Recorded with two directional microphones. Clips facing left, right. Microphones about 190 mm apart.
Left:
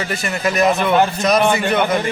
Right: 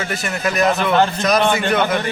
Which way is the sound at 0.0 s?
Centre (ahead or behind).